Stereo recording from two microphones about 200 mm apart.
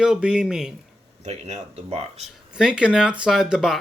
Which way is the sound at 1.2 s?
35° right (ahead or behind).